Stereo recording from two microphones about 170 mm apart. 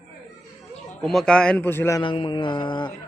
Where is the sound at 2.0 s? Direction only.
30° left (ahead or behind).